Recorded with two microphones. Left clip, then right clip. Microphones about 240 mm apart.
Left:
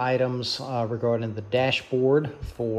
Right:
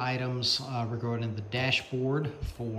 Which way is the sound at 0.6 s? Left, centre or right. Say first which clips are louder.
Left 7 dB; centre.